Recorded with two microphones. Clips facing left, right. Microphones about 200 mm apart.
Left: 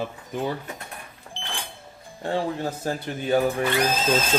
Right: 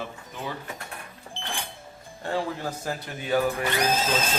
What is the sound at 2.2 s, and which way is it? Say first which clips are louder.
Speech: left 3 dB; 30° left (ahead or behind).